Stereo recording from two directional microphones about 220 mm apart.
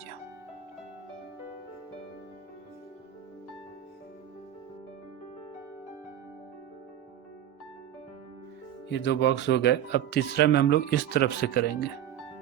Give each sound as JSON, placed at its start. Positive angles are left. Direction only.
{"t": 8.9, "sound": "speech", "side_deg": 50}